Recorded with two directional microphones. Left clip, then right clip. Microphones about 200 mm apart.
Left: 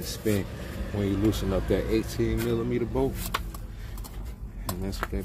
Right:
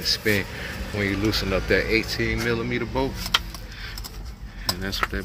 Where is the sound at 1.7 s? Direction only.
5° left (ahead or behind).